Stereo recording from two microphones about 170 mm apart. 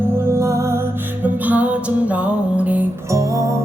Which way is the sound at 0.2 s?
15° right (ahead or behind).